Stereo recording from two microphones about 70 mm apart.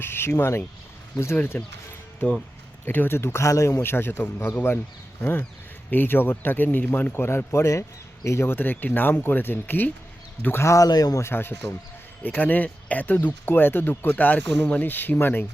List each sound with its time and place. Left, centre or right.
0.0 s speech: left
2.8 s a man's voice: left
3.4 s speech: left
3.8 s a man's voice: left
10.8 s speech: left
11.2 s a man's voice: left